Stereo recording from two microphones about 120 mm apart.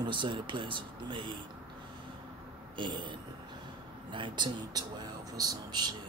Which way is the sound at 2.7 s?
40° right (ahead or behind).